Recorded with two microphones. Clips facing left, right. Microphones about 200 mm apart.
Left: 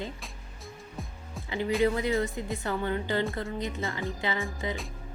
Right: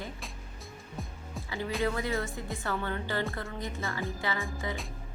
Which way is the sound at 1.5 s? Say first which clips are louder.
Left 6 dB; 20° left (ahead or behind).